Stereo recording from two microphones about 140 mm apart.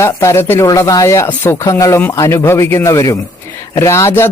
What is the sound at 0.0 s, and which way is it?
Speech, 20° left (ahead or behind).